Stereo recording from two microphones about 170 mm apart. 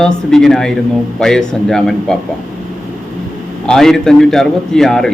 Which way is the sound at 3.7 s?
Centre (ahead or behind).